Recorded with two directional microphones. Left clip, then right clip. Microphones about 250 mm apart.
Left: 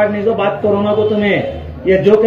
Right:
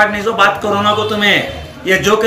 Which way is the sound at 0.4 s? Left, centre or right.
Right.